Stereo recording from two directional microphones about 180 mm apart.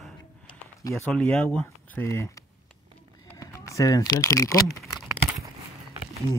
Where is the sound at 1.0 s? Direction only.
5° left (ahead or behind).